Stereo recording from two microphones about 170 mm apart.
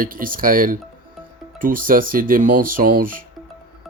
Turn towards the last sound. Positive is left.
turn(degrees=-55)  # may be behind; listen again after turning